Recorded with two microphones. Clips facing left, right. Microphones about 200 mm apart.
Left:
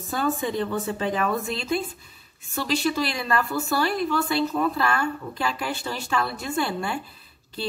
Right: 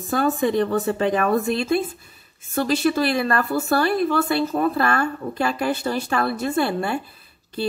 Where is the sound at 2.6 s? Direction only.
50° right (ahead or behind).